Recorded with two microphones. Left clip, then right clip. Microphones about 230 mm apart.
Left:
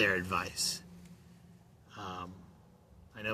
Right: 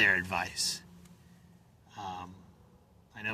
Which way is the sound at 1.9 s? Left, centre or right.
Right.